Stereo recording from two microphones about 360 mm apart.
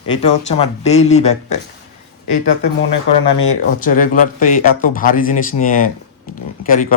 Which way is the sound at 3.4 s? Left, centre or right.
Left.